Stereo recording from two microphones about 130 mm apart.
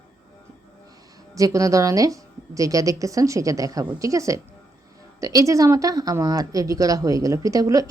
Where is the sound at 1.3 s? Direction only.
25° right (ahead or behind).